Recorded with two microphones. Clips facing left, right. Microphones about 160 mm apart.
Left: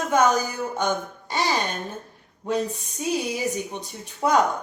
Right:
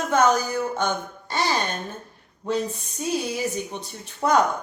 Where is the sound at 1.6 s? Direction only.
Centre (ahead or behind).